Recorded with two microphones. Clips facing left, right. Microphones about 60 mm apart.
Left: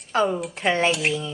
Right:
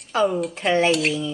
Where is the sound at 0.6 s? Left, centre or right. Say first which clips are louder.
Right 2 dB; left.